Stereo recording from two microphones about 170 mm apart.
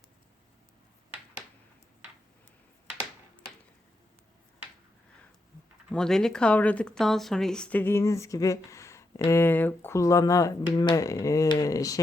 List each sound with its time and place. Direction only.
5.9 s speech: 5° left (ahead or behind); by 11.9 s 20° left (ahead or behind)